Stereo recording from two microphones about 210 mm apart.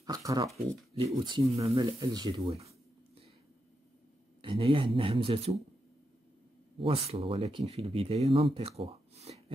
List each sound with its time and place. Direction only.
0.0 s a sound: 15° right (ahead or behind)
0.9 s speech: 25° right (ahead or behind)
4.4 s speech: 25° right (ahead or behind)
6.8 s speech: 25° right (ahead or behind)